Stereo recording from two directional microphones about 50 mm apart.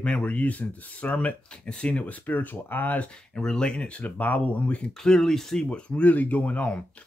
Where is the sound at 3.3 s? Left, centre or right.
Centre.